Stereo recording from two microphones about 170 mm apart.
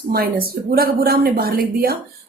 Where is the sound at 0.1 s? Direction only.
65° right (ahead or behind).